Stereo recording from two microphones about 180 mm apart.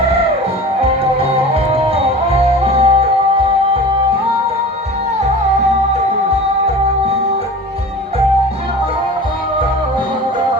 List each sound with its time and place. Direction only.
2.3 s music: 35° right (ahead or behind)